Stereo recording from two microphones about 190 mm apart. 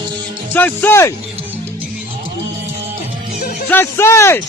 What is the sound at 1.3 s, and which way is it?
Music, 10° right (ahead or behind).